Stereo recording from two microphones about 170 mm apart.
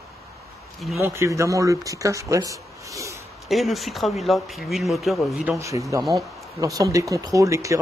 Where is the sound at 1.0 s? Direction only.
15° right (ahead or behind).